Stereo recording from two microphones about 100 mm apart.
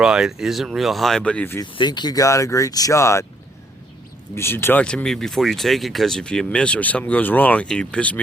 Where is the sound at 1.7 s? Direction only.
50° left (ahead or behind); by 3.3 s 30° left (ahead or behind).